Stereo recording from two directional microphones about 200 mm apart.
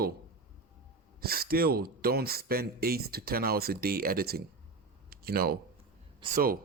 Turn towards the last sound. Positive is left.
turn(degrees=-45)  # may be behind; listen again after turning